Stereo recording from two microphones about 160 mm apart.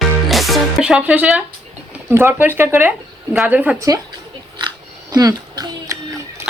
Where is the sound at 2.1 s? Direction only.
15° right (ahead or behind).